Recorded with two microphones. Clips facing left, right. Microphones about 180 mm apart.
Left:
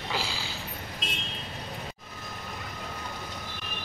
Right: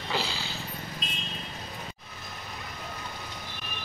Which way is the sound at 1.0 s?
80° left.